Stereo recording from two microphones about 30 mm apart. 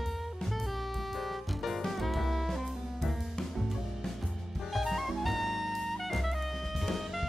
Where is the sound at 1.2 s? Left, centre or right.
Centre.